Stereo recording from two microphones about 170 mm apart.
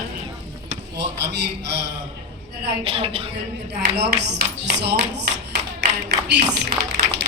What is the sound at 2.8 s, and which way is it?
Speech, 35° right (ahead or behind).